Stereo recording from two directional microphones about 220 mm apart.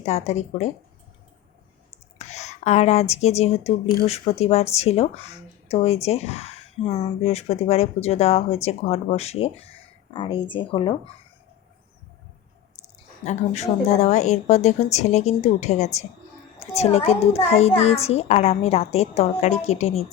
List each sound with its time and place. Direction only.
0.0 s a woman's voice: 30° left (ahead or behind)
2.1 s a woman's voice: 30° left (ahead or behind)
13.2 s a woman's voice: 30° left (ahead or behind)